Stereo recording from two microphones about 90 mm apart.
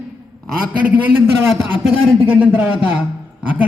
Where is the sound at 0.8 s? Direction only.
20° right (ahead or behind).